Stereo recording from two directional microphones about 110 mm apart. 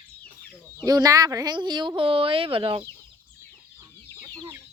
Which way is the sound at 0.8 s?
35° right (ahead or behind).